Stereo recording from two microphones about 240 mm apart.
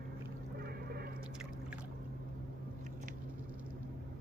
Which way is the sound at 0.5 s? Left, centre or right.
Right.